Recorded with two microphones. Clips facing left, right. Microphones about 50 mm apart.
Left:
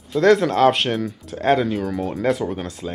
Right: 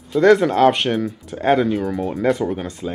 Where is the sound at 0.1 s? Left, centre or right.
Centre.